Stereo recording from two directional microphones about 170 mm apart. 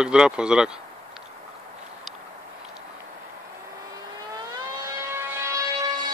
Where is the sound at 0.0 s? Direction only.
5° right (ahead or behind).